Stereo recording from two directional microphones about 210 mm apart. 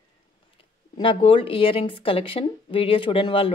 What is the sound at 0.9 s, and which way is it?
Speech, 25° left (ahead or behind).